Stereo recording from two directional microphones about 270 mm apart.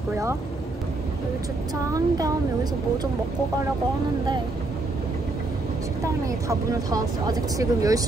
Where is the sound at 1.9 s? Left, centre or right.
Centre.